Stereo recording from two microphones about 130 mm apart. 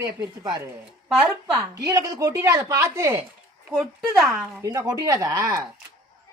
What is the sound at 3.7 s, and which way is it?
Speech, 5° right (ahead or behind).